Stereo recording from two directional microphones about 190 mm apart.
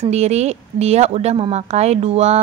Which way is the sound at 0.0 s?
35° right (ahead or behind).